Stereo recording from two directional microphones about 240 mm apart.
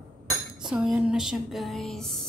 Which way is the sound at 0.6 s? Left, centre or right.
Centre.